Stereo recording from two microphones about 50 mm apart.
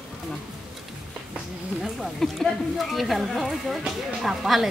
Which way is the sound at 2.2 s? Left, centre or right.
Centre.